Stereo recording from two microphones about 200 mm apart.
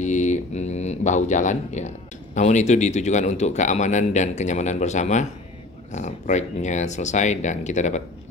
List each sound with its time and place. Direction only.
0.0 s speech: 35° left (ahead or behind)